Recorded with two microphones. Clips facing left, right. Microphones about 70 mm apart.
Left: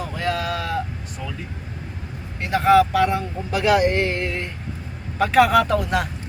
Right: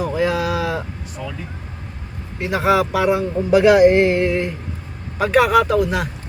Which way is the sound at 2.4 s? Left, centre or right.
Centre.